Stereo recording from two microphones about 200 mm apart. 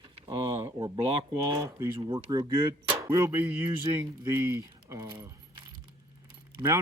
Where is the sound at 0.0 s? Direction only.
25° right (ahead or behind).